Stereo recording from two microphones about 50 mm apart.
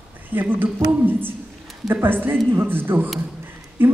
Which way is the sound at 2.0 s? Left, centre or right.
Right.